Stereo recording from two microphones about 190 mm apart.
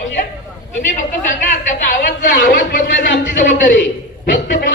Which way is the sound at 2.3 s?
60° left (ahead or behind).